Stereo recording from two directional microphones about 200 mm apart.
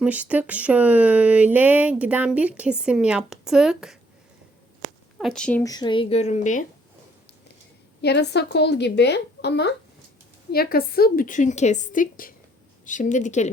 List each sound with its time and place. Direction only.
0.0 s speech: 5° right (ahead or behind)
5.1 s speech: 5° left (ahead or behind)
5.6 s a woman's voice: 20° left (ahead or behind); by 6.7 s 40° left (ahead or behind)
8.0 s a woman's voice: 55° left (ahead or behind); by 13.5 s 35° left (ahead or behind)